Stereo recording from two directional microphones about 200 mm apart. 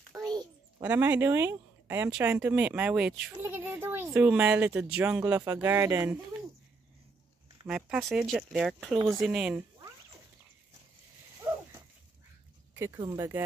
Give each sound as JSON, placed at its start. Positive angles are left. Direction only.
{"t": 0.3, "sound": "a sound", "side_deg": -20}
{"t": 0.8, "sound": "speech", "side_deg": -10}
{"t": 7.6, "sound": "speech", "side_deg": -5}
{"t": 8.9, "sound": "speech", "side_deg": -15}
{"t": 9.2, "sound": "speech", "side_deg": 0}
{"t": 12.7, "sound": "speech", "side_deg": -15}